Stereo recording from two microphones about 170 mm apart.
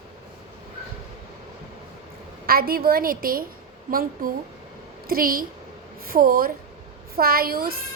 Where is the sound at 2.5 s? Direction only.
60° right (ahead or behind).